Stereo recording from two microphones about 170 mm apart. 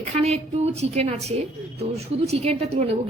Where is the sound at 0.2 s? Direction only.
40° right (ahead or behind).